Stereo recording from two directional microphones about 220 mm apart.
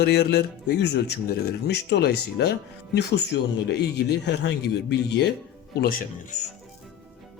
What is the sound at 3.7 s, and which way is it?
Speech, 50° left (ahead or behind).